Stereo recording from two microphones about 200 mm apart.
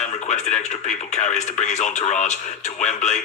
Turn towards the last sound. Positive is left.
turn(degrees=35)  # may be behind; listen again after turning